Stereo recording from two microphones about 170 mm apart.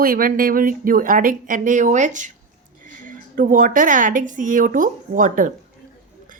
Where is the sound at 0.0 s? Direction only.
55° right (ahead or behind).